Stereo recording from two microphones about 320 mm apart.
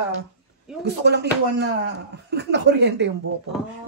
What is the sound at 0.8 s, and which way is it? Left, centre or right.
Speech, right.